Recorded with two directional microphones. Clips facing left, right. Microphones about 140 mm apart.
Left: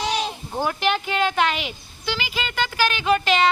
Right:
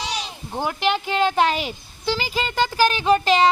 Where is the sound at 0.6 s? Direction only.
25° right (ahead or behind).